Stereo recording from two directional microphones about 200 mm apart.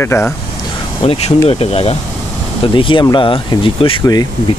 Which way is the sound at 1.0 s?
30° left (ahead or behind).